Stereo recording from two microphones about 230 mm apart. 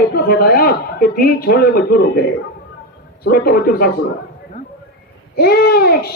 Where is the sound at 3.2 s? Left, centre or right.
Left.